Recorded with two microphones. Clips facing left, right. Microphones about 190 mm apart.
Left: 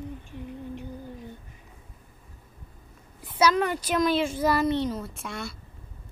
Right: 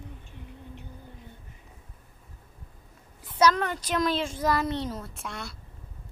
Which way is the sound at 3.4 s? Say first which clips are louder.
Left 1 dB; 10° left (ahead or behind).